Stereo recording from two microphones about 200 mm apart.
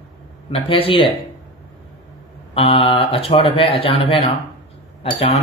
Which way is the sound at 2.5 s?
30° left (ahead or behind).